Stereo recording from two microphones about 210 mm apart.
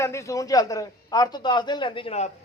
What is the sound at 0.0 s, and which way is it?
A man's voice, 15° left (ahead or behind).